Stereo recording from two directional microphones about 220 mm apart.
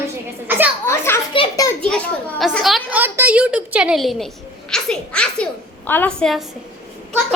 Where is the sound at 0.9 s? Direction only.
10° left (ahead or behind).